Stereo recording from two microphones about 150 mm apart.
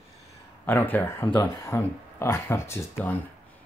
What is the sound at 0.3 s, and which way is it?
Speech, 15° left (ahead or behind).